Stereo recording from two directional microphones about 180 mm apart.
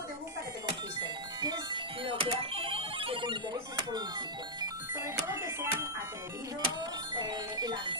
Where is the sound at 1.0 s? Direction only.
25° right (ahead or behind).